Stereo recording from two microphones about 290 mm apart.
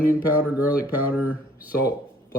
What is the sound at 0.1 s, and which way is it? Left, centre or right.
Speech, centre.